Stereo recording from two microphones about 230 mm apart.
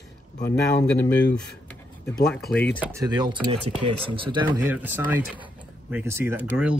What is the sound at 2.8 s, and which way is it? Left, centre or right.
Speech, centre.